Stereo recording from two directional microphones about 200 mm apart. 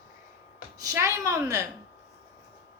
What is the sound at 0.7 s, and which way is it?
Speech, 15° right (ahead or behind).